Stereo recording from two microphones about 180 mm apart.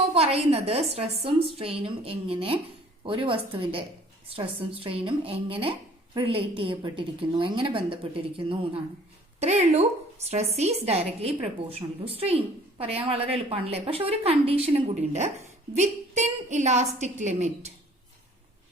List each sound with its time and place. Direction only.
0.1 s a woman's voice: 35° right (ahead or behind)